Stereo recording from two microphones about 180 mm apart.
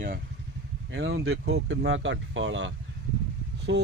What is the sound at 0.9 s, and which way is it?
Speech, 75° right (ahead or behind).